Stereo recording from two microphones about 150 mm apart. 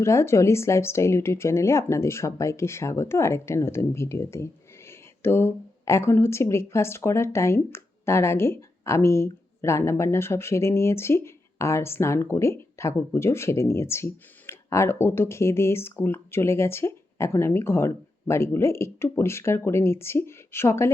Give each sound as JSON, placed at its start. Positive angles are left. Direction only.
{"t": 0.0, "sound": "speech", "side_deg": 20}